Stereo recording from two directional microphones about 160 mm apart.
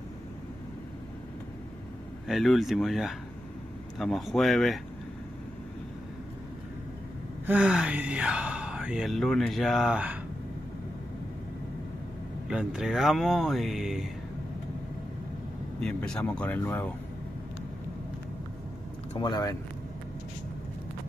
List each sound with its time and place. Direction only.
2.2 s speech: centre (ahead or behind)
7.4 s speech: 10° right (ahead or behind)
12.4 s speech: 5° right (ahead or behind)
15.8 s speech: 5° left (ahead or behind)
19.1 s speech: 25° left (ahead or behind)